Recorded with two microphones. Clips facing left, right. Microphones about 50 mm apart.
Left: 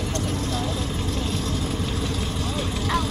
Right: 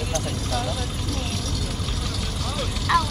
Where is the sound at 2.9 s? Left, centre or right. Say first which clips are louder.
Right 5 dB; right.